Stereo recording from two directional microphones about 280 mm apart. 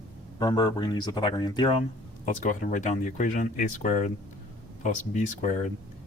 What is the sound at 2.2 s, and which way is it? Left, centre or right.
Speech, left.